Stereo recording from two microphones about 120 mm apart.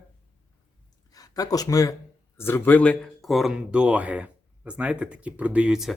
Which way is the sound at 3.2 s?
Centre (ahead or behind).